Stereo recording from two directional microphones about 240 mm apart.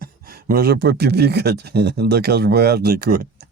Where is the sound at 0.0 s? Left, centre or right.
Right.